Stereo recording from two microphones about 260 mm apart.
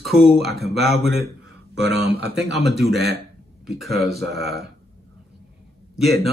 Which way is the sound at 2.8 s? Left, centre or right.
Right.